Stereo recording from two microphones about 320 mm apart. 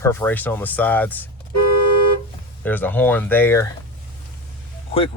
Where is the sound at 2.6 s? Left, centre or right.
Centre.